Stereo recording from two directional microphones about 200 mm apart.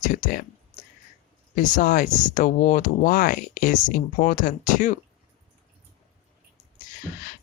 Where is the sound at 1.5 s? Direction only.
40° left (ahead or behind).